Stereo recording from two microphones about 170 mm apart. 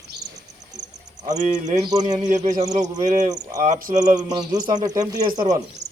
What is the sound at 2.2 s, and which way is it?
Speech, 40° right (ahead or behind).